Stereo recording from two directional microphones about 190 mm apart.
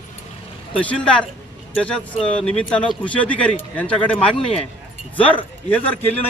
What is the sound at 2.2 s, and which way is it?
A man's voice, 5° left (ahead or behind).